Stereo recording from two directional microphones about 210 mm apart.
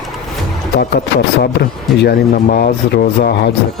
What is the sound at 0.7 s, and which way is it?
Speech, 50° left (ahead or behind).